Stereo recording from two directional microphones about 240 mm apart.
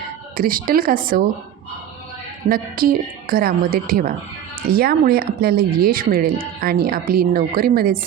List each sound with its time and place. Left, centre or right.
0.3 s speech: right
2.5 s speech: right